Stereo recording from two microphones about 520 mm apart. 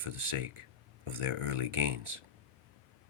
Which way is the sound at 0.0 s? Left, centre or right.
Right.